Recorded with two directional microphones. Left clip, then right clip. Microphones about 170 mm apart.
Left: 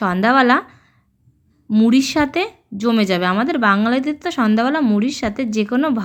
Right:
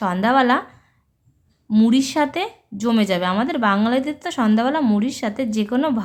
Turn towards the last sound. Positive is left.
turn(degrees=15)  # may be behind; listen again after turning